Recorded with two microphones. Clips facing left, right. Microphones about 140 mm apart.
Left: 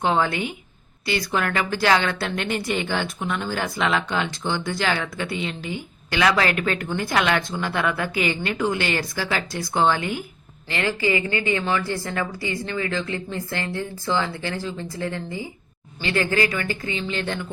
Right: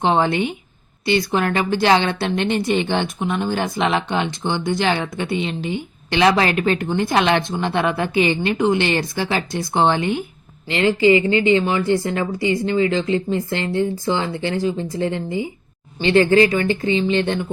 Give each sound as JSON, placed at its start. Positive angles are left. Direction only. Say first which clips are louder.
{"t": 0.0, "sound": "speech", "louder": "right 4 dB", "side_deg": -25}